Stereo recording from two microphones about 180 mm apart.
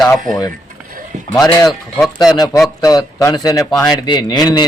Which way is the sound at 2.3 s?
20° left (ahead or behind).